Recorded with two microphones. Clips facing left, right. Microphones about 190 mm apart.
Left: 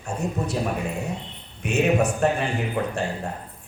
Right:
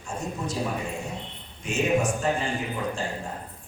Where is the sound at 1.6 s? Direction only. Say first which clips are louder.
Left 3 dB; 65° left (ahead or behind).